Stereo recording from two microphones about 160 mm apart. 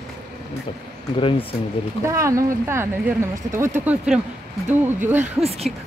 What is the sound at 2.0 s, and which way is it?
Speech, 20° right (ahead or behind).